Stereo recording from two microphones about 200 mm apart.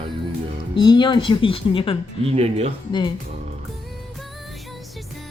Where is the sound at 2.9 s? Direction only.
25° left (ahead or behind).